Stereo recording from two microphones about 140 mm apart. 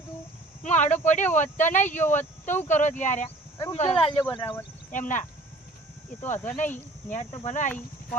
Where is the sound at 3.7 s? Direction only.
45° left (ahead or behind).